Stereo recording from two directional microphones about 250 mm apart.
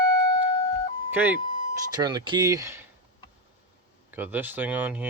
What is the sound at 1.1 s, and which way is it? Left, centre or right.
Speech, centre.